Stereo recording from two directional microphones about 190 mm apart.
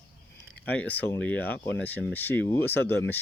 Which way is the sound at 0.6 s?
10° left (ahead or behind).